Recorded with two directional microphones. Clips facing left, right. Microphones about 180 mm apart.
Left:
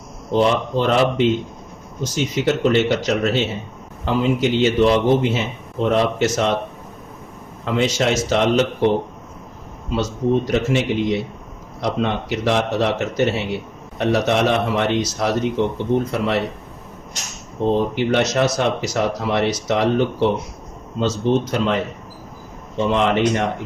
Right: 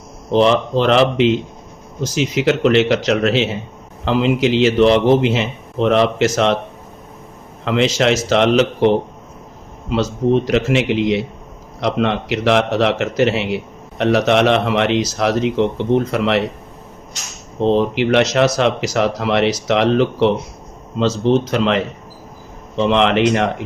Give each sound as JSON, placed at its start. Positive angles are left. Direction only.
{"t": 0.3, "sound": "speech", "side_deg": -90}
{"t": 7.6, "sound": "speech", "side_deg": -90}
{"t": 9.9, "sound": "speech", "side_deg": -90}
{"t": 17.6, "sound": "speech", "side_deg": -90}